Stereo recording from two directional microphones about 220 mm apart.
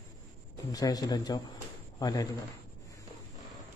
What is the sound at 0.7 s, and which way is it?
Speech, 15° left (ahead or behind).